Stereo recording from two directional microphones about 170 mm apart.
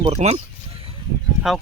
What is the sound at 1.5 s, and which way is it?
Speech, 5° right (ahead or behind).